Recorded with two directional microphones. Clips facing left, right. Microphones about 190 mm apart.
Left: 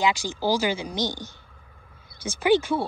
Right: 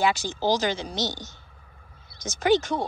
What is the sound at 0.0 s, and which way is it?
Speech, 15° left (ahead or behind).